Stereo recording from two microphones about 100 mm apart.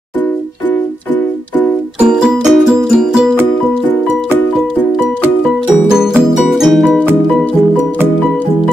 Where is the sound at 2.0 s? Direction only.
5° right (ahead or behind).